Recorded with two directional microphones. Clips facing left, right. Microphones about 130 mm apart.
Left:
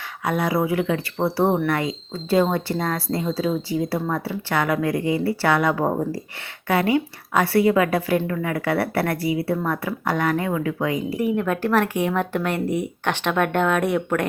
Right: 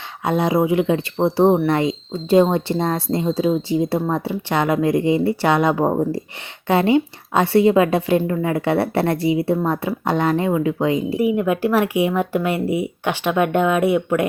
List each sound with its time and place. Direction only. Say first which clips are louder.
0.3 s speech: right 4 dB; 25° right (ahead or behind)
11.2 s speech: right 3 dB; 10° right (ahead or behind)